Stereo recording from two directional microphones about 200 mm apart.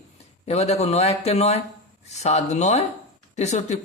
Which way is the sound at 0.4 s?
30° left (ahead or behind).